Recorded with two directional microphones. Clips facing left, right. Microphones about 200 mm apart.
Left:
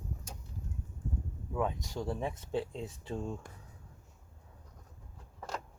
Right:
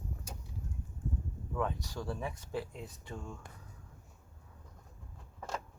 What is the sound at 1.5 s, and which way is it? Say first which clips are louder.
Speech: left 2 dB; 20° left (ahead or behind).